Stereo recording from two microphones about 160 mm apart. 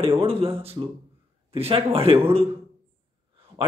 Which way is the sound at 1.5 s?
35° right (ahead or behind).